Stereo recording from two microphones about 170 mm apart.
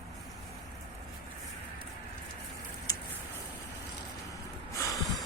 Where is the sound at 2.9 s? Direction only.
20° left (ahead or behind).